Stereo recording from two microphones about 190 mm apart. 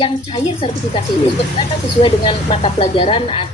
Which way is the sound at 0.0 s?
25° left (ahead or behind).